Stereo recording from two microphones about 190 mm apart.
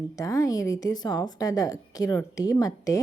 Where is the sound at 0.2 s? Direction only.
15° left (ahead or behind).